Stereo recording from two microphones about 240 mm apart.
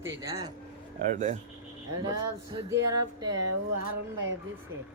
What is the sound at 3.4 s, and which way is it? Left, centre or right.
Speech, right.